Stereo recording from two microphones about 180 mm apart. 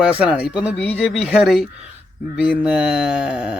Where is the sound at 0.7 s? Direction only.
35° left (ahead or behind).